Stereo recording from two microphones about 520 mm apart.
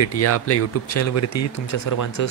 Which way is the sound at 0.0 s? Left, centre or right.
Left.